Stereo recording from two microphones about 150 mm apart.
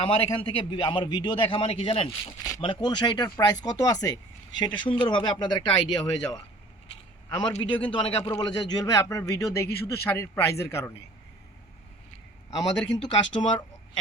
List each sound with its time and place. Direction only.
0.0 s a man's voice: 35° left (ahead or behind)
2.0 s a man's voice: 25° left (ahead or behind)
12.5 s speech: 25° left (ahead or behind)